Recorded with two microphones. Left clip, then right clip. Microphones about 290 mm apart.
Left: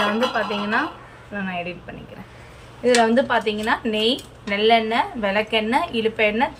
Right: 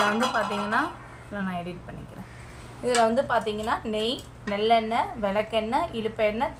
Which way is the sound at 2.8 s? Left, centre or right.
Right.